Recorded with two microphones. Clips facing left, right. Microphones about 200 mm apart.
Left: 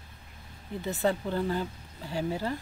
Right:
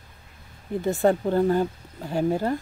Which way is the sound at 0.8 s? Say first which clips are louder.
Right 7 dB; 50° right (ahead or behind).